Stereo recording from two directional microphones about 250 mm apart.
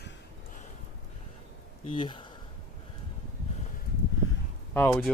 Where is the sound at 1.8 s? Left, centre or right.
Left.